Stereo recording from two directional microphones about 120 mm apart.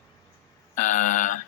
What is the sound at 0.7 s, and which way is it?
Speech, 90° left.